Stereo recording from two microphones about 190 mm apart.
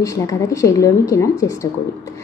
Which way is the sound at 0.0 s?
15° left (ahead or behind).